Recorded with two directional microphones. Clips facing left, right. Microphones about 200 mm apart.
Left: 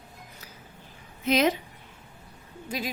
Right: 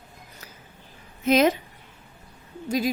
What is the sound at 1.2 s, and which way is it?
Speech, 45° right (ahead or behind).